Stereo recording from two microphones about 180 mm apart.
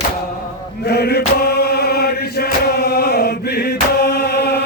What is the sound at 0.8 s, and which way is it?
Chant, 65° left (ahead or behind).